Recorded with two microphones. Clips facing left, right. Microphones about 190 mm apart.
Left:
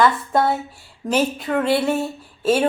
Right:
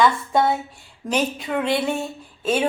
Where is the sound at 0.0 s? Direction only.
Centre (ahead or behind).